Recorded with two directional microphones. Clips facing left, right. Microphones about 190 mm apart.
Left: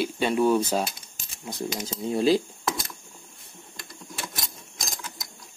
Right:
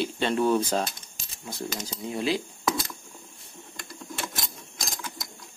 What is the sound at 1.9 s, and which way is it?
Speech, 35° left (ahead or behind).